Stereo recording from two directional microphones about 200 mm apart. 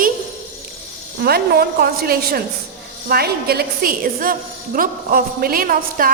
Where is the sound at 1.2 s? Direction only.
50° right (ahead or behind).